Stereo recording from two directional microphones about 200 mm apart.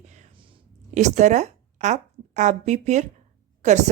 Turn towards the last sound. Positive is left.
turn(degrees=-35)  # may be behind; listen again after turning